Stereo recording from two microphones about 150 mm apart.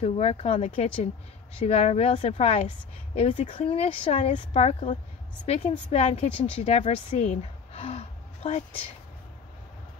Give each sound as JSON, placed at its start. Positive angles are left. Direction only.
{"t": 0.0, "sound": "a woman's voice", "side_deg": 40}